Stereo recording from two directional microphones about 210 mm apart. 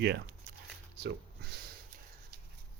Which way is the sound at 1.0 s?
50° right (ahead or behind).